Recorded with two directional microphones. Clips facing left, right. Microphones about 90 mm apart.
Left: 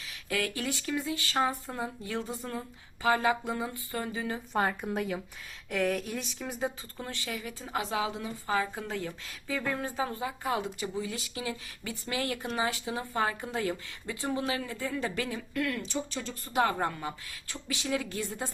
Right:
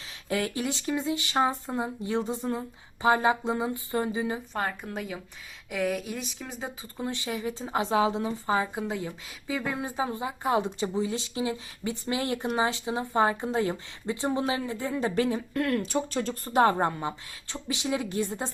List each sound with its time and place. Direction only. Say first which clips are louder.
0.3 s speech: right 3 dB; 25° right (ahead or behind)
4.5 s speech: left 2 dB; 5° left (ahead or behind)
6.9 s speech: right 5 dB; 20° right (ahead or behind)